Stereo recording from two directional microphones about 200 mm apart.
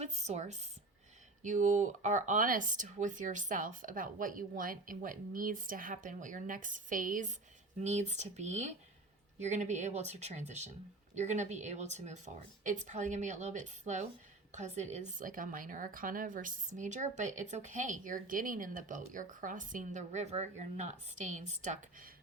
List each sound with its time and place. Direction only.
0.0 s speech: 35° right (ahead or behind)